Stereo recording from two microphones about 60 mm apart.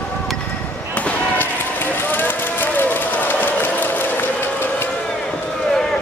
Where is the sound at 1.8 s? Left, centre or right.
Left.